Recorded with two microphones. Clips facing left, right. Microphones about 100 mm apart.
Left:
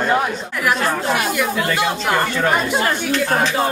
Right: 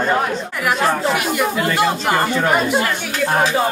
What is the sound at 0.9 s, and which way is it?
A man's voice, centre (ahead or behind).